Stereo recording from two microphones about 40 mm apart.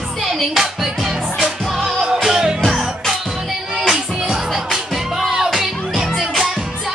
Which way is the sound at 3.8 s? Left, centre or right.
Centre.